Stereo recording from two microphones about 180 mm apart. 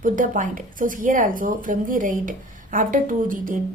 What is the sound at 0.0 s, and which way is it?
Speech, 50° right (ahead or behind).